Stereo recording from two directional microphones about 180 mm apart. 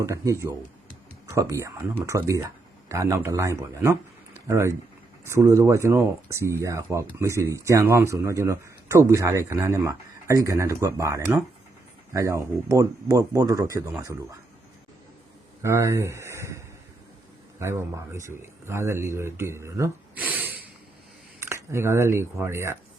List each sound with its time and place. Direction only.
0.0 s speech: 15° right (ahead or behind)
15.6 s speech: 15° right (ahead or behind)